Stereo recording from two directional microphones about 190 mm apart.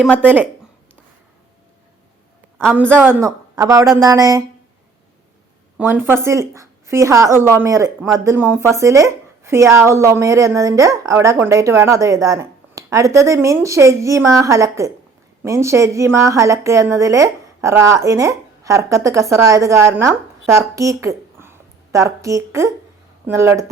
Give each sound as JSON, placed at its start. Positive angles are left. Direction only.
{"t": 0.0, "sound": "speech", "side_deg": 5}
{"t": 2.6, "sound": "a woman's voice", "side_deg": -10}
{"t": 5.7, "sound": "a woman's voice", "side_deg": -10}